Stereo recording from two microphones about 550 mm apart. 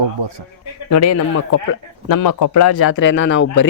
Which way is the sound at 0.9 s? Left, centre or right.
Left.